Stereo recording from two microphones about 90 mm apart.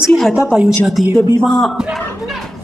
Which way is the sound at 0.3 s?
5° right (ahead or behind).